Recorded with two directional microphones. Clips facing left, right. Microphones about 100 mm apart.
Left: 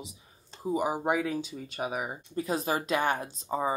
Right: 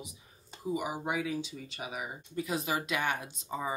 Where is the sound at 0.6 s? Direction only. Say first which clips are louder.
Left 5 dB; 40° left (ahead or behind).